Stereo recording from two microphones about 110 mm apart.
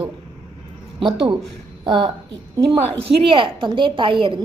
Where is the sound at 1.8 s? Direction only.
45° right (ahead or behind).